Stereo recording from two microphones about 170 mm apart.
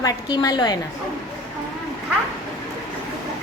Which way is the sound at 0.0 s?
20° left (ahead or behind).